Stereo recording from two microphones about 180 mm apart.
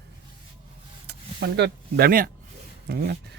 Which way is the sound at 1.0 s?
70° right (ahead or behind).